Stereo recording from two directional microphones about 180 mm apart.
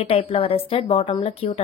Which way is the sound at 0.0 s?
30° left (ahead or behind).